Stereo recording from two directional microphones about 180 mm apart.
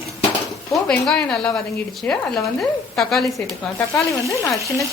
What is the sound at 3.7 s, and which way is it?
Frying, 15° left (ahead or behind).